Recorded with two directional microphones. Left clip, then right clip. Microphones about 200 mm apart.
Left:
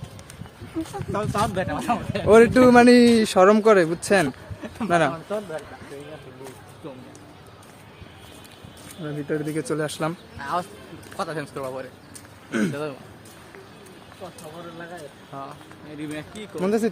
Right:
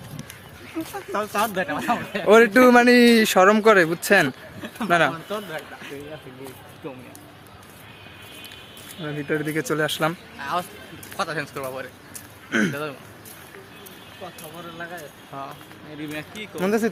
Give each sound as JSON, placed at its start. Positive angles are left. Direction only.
{"t": 0.9, "sound": "speech", "side_deg": 10}
{"t": 5.1, "sound": "a man's voice", "side_deg": -15}
{"t": 9.0, "sound": "speech", "side_deg": -10}
{"t": 10.4, "sound": "a man's voice", "side_deg": 20}
{"t": 12.5, "sound": "speech", "side_deg": 0}
{"t": 14.8, "sound": "speech", "side_deg": 10}
{"t": 16.6, "sound": "speech", "side_deg": 0}